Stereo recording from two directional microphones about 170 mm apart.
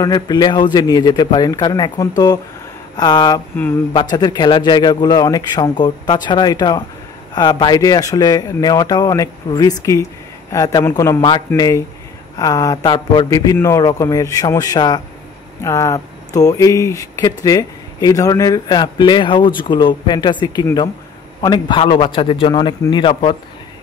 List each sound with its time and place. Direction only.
0.0 s a man's voice: 25° left (ahead or behind)
11.1 s speech: 25° left (ahead or behind)